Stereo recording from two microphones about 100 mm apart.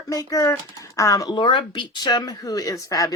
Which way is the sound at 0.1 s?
35° left (ahead or behind).